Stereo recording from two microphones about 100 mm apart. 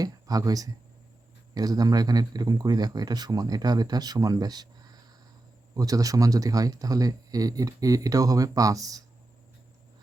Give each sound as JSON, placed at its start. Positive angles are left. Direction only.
{"t": 0.0, "sound": "speech", "side_deg": -40}